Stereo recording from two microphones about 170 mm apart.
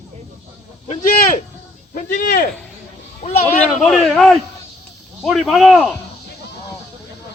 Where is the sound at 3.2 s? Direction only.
40° left (ahead or behind).